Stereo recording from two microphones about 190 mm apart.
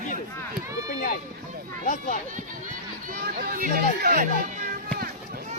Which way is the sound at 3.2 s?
55° right (ahead or behind).